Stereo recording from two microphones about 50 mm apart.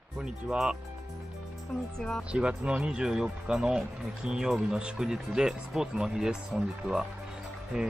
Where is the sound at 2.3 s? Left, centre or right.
Right.